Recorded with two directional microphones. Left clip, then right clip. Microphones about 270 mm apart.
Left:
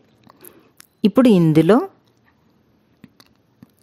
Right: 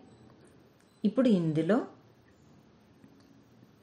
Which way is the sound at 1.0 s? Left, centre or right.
Left.